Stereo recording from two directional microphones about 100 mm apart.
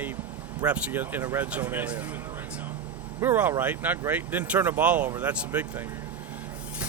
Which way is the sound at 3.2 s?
20° right (ahead or behind).